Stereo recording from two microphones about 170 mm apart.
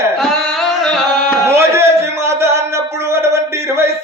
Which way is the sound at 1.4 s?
15° right (ahead or behind).